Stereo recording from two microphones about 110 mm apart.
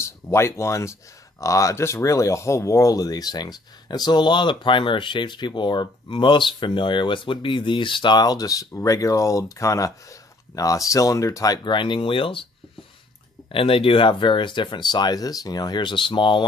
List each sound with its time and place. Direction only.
0.0 s speech: 25° left (ahead or behind); by 12.4 s 55° left (ahead or behind)
13.5 s speech: 55° left (ahead or behind)